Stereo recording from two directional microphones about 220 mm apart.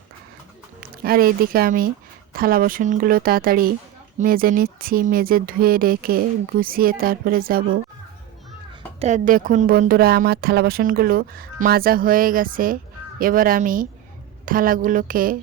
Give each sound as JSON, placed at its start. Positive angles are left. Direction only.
{"t": 0.8, "sound": "speech", "side_deg": -40}
{"t": 9.0, "sound": "speech", "side_deg": -30}